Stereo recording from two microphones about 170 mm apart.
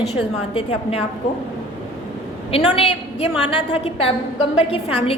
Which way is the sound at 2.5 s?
35° left (ahead or behind).